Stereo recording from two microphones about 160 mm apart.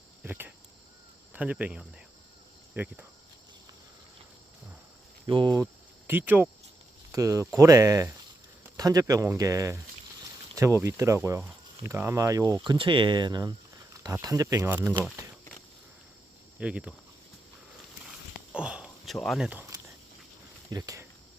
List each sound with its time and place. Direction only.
0.2 s cricket: 10° right (ahead or behind)
1.3 s speech: 10° right (ahead or behind)
5.2 s speech: 30° right (ahead or behind)
6.1 s speech: 10° right (ahead or behind)
16.6 s speech: 5° right (ahead or behind)
18.5 s a sound: 5° right (ahead or behind)
20.7 s speech: 25° right (ahead or behind)